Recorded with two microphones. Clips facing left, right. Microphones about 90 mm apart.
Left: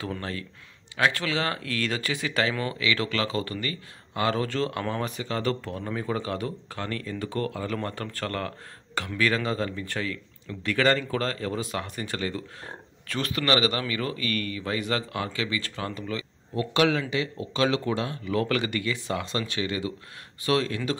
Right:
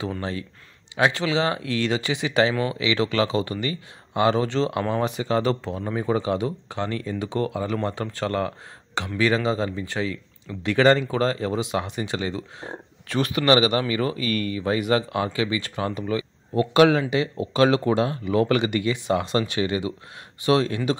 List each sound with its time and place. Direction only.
0.0 s speech: 10° right (ahead or behind)
2.8 s speech: 25° right (ahead or behind)
18.3 s speech: 20° right (ahead or behind)